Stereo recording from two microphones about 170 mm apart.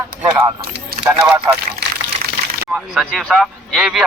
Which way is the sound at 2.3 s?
60° right (ahead or behind).